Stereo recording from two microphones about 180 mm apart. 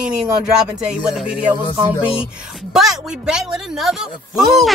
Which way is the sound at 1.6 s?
30° left (ahead or behind).